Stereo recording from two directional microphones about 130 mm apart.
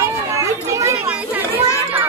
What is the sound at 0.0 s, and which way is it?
Children playing, 25° right (ahead or behind).